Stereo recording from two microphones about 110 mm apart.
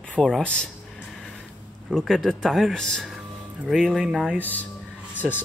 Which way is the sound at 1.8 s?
Centre (ahead or behind).